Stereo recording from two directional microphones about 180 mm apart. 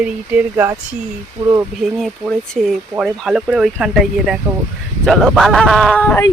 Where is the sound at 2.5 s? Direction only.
Centre (ahead or behind).